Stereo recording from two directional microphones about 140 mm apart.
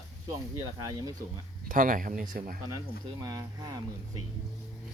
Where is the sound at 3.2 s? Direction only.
25° right (ahead or behind).